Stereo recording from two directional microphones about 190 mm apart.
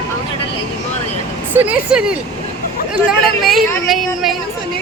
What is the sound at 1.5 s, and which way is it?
Speech, 5° right (ahead or behind).